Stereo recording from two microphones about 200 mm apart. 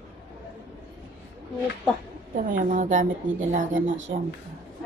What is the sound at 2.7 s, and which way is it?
Speech, 40° right (ahead or behind).